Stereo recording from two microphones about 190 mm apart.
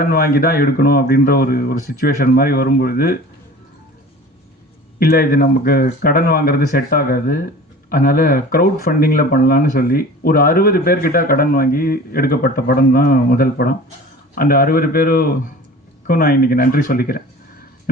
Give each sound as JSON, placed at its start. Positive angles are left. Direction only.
{"t": 0.0, "sound": "speech", "side_deg": 50}
{"t": 4.9, "sound": "speech", "side_deg": 55}